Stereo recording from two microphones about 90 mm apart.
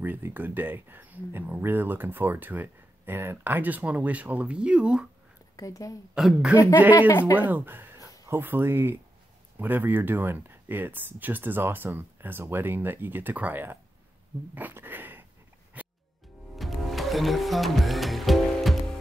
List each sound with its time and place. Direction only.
0.0 s speech: 20° right (ahead or behind)
5.6 s a woman's voice: 40° left (ahead or behind)
6.1 s a woman's voice: 5° right (ahead or behind)
7.3 s speech: 20° right (ahead or behind)
15.8 s music: 15° right (ahead or behind)
16.5 s music: centre (ahead or behind)